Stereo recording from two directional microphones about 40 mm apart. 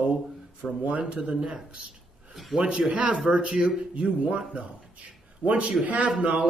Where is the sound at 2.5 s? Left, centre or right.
Right.